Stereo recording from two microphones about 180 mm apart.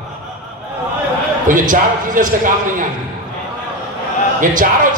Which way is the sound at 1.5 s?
45° right (ahead or behind).